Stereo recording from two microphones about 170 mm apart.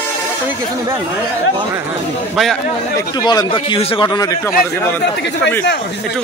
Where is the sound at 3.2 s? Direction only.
25° left (ahead or behind).